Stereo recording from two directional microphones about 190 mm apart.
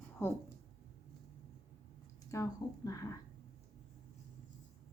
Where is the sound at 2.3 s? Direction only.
15° left (ahead or behind).